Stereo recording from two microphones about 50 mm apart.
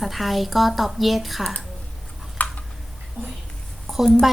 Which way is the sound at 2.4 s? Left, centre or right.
Left.